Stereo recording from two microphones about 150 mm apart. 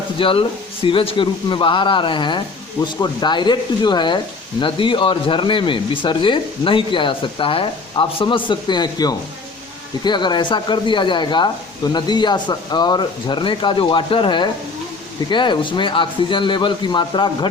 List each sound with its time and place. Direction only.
0.2 s speech: 35° left (ahead or behind)